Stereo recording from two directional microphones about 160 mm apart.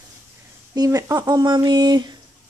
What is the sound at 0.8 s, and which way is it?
Speech, 20° right (ahead or behind).